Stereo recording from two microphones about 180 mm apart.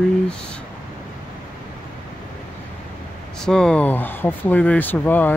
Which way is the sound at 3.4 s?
5° left (ahead or behind).